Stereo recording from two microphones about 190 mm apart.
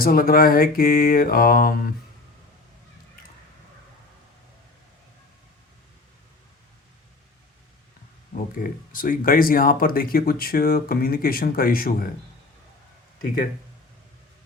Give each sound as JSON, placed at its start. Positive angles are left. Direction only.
{"t": 0.0, "sound": "speech", "side_deg": 50}
{"t": 8.5, "sound": "speech", "side_deg": 45}